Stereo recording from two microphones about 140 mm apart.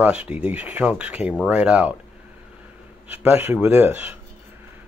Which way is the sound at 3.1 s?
15° right (ahead or behind).